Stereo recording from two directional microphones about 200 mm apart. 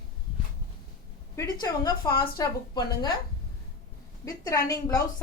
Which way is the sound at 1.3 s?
20° left (ahead or behind).